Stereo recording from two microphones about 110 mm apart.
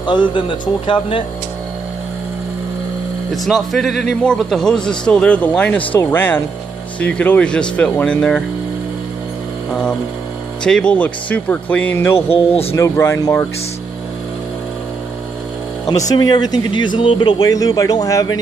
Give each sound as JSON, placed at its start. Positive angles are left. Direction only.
{"t": 0.0, "sound": "a man's voice", "side_deg": 45}
{"t": 3.4, "sound": "a man's voice", "side_deg": 0}
{"t": 10.6, "sound": "a man's voice", "side_deg": 10}
{"t": 12.3, "sound": "speech", "side_deg": 65}
{"t": 12.7, "sound": "speech", "side_deg": 25}
{"t": 16.1, "sound": "speech", "side_deg": 40}